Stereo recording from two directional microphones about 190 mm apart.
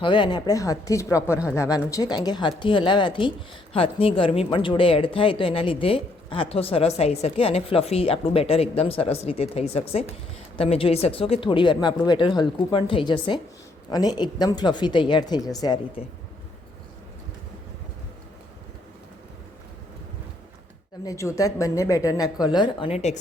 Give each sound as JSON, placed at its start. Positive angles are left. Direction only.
{"t": 0.0, "sound": "speech", "side_deg": 25}
{"t": 21.0, "sound": "speech", "side_deg": 15}